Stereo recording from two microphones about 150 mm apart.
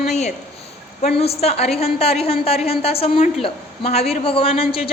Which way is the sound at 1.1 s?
40° left (ahead or behind).